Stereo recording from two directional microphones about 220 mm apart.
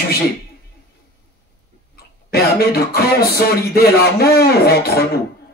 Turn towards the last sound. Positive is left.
turn(degrees=45)  # may be behind; listen again after turning